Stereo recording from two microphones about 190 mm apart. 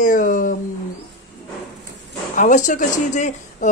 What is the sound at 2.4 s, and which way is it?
Speech, 40° left (ahead or behind).